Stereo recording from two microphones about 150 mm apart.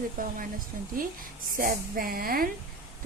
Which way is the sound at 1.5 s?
70° right (ahead or behind).